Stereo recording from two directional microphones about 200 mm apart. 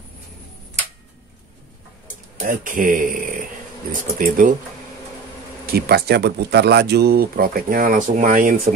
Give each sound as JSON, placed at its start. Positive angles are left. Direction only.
{"t": 2.4, "sound": "speech", "side_deg": -40}
{"t": 5.7, "sound": "speech", "side_deg": -50}